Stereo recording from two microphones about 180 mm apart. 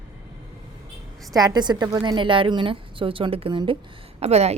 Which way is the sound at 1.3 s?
20° right (ahead or behind).